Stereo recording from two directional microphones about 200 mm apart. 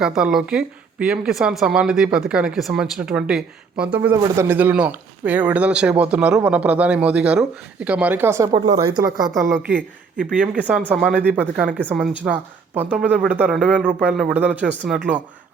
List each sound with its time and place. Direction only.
0.0 s speech: 5° right (ahead or behind)
11.8 s speech: 5° left (ahead or behind)
12.2 s speech: 10° right (ahead or behind)